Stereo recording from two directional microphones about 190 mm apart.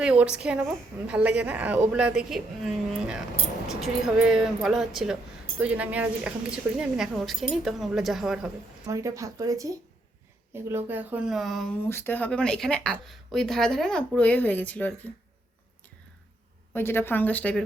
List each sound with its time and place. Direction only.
0.0 s speech: 5° right (ahead or behind)
8.9 s speech: 15° right (ahead or behind); by 11.8 s centre (ahead or behind)
11.9 s speech: 10° left (ahead or behind)
16.7 s speech: 10° left (ahead or behind)